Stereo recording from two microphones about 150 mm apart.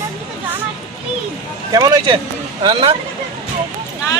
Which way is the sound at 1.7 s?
25° right (ahead or behind).